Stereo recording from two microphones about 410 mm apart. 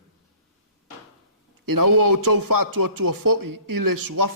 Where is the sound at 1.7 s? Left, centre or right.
Right.